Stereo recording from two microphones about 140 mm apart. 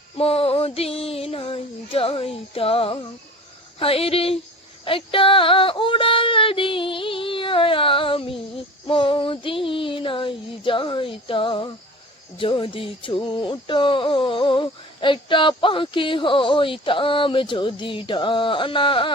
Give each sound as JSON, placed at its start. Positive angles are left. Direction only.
{"t": 0.2, "sound": "child singing", "side_deg": 45}
{"t": 4.9, "sound": "a sound", "side_deg": 40}
{"t": 8.9, "sound": "child singing", "side_deg": 40}
{"t": 12.4, "sound": "music", "side_deg": 40}